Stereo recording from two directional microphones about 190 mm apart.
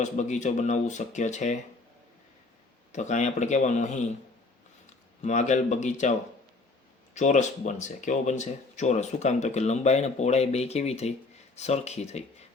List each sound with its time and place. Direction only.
0.0 s speech: 40° left (ahead or behind)
2.9 s speech: 40° left (ahead or behind)
5.2 s speech: 40° left (ahead or behind)